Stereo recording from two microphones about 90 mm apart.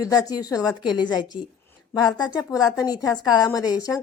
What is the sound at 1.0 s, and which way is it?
A woman's voice, 55° left (ahead or behind).